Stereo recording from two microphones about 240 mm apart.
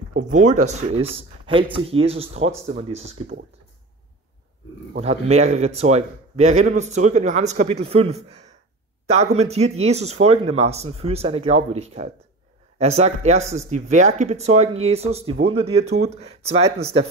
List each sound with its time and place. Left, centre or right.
0.3 s a man's voice: right
5.0 s a man's voice: right